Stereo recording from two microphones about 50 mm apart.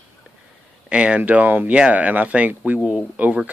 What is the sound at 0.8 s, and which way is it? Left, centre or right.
Speech, right.